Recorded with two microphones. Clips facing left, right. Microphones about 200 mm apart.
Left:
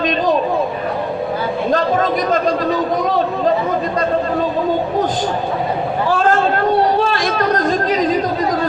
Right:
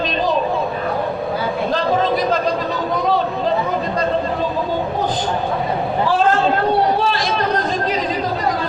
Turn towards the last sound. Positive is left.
turn(degrees=45)  # may be behind; listen again after turning